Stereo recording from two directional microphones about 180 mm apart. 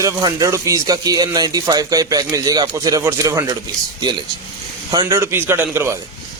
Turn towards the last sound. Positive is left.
turn(degrees=-15)  # may be behind; listen again after turning